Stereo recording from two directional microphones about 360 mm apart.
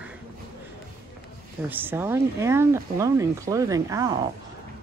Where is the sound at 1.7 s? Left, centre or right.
Centre.